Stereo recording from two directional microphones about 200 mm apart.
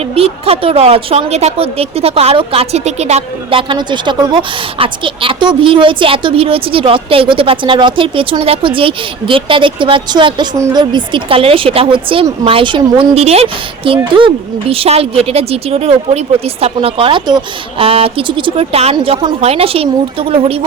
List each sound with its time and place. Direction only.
0.1 s a woman's voice: 30° right (ahead or behind)